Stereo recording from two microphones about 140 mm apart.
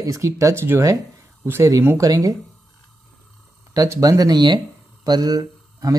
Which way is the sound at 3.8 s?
25° right (ahead or behind).